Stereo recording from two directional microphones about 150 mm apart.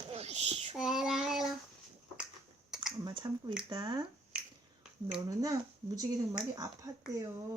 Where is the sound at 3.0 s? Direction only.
30° right (ahead or behind).